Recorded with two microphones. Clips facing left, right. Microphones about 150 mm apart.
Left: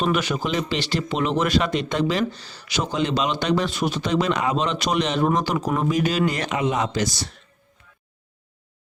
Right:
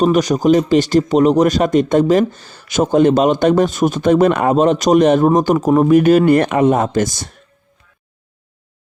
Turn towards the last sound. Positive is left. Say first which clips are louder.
# right 7 dB
turn(degrees=-50)  # may be behind; listen again after turning